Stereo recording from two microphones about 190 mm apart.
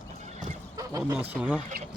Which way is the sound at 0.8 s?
15° right (ahead or behind).